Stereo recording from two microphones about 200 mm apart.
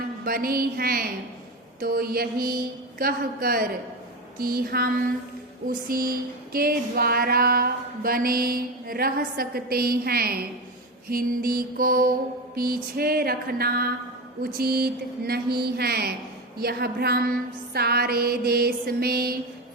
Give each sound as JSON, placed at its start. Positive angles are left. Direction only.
{"t": 0.3, "sound": "music", "side_deg": -50}